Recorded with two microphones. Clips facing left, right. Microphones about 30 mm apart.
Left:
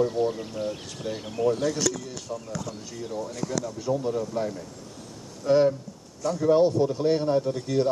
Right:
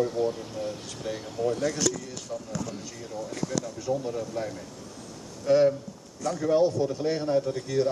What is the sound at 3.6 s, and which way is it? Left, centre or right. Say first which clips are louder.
Speech: left 2 dB; centre.